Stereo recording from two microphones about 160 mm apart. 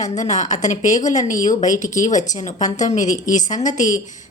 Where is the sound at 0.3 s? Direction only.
50° left (ahead or behind).